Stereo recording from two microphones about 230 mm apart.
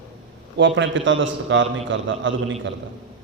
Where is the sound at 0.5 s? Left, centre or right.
Right.